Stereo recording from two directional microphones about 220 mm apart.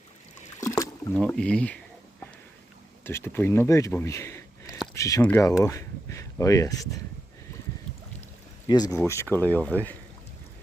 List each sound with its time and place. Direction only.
0.6 s rowboat: 15° left (ahead or behind)
1.2 s speech: 5° left (ahead or behind)
3.0 s speech: 10° left (ahead or behind)
8.6 s speech: 15° left (ahead or behind)